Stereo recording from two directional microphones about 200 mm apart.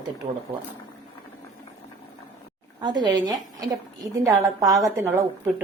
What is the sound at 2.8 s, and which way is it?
A woman's voice, 20° right (ahead or behind).